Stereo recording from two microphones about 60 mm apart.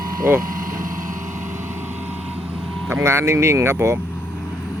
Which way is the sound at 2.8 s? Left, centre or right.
Right.